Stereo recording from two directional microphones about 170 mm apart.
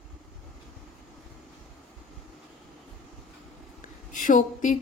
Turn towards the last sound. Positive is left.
turn(degrees=50)  # may be behind; listen again after turning